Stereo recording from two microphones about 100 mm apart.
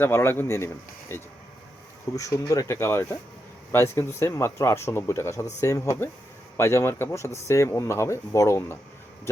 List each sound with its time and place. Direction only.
0.0 s speech: 25° left (ahead or behind)